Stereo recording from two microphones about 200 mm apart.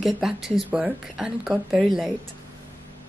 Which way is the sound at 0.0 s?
Centre (ahead or behind).